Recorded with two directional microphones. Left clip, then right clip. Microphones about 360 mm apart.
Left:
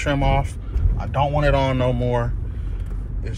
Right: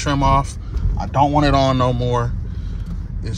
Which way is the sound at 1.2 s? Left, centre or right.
Centre.